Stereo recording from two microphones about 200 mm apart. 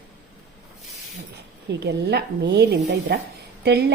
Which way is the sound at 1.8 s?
55° right (ahead or behind).